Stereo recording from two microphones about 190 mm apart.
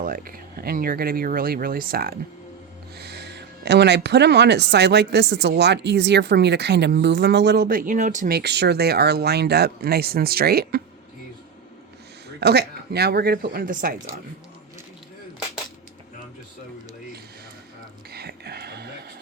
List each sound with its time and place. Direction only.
0.0 s speech: 50° right (ahead or behind)
12.4 s speech: 60° right (ahead or behind)
18.1 s a sound: 55° right (ahead or behind)